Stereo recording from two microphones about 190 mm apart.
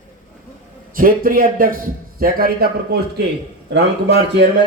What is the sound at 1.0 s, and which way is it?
A man's voice, 50° right (ahead or behind).